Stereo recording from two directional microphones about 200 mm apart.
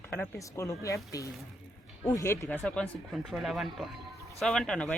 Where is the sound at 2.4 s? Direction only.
5° left (ahead or behind).